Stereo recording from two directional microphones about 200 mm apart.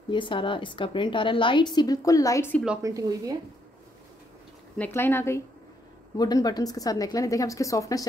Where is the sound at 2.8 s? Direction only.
15° right (ahead or behind).